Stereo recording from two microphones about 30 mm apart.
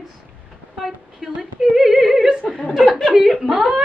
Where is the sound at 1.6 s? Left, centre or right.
Centre.